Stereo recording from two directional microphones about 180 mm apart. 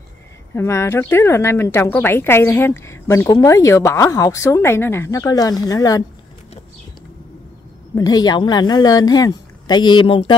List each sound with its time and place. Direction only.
0.6 s a woman's voice: 15° left (ahead or behind)
7.9 s a woman's voice: 20° left (ahead or behind)